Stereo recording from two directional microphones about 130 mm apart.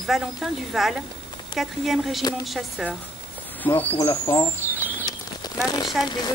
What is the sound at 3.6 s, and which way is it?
Speech, 15° left (ahead or behind).